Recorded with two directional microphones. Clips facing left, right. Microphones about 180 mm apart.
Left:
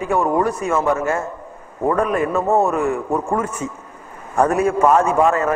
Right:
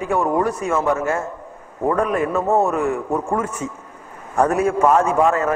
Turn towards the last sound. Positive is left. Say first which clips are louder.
# left 1 dB
turn(degrees=25)  # may be behind; listen again after turning